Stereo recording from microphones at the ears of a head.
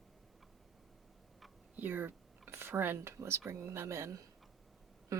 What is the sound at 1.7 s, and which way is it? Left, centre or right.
A woman's voice, right.